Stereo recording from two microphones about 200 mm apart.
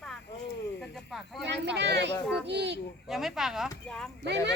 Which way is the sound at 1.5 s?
60° right (ahead or behind).